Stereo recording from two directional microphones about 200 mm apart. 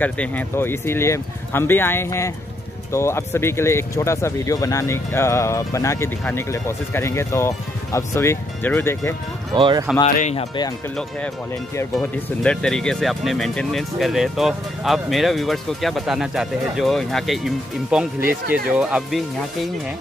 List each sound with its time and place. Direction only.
0.0 s speech: 10° left (ahead or behind)
9.6 s speech: 25° right (ahead or behind)
10.1 s speech: 35° left (ahead or behind)
11.9 s speech: 5° left (ahead or behind)